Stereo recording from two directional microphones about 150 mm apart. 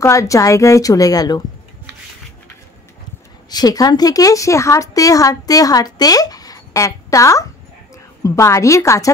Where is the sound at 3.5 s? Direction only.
25° left (ahead or behind).